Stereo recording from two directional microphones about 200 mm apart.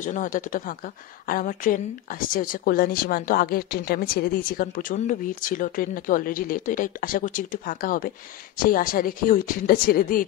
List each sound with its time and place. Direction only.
0.0 s a woman's voice: 40° left (ahead or behind)